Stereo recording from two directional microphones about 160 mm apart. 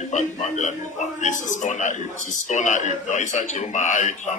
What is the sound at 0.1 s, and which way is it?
A man's voice, 50° left (ahead or behind).